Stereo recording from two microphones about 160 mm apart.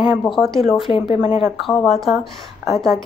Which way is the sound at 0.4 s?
Centre (ahead or behind).